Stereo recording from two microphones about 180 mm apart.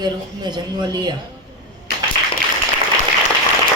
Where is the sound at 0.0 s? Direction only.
25° right (ahead or behind).